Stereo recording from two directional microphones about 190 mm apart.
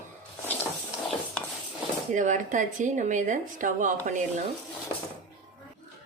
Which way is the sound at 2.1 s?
40° right (ahead or behind).